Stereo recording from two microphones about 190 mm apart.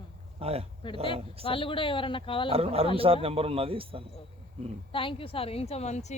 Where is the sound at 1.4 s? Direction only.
25° left (ahead or behind).